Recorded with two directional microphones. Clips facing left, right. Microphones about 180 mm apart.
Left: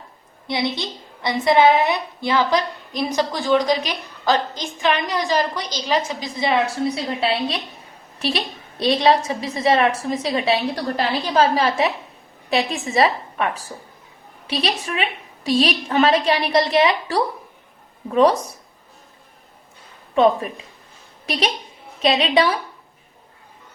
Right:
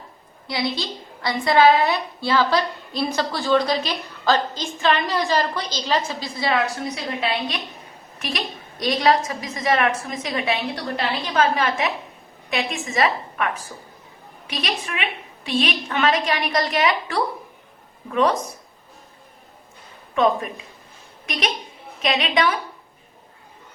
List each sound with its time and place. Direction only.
0.4 s a woman's voice: 25° left (ahead or behind)
20.1 s a woman's voice: 35° left (ahead or behind)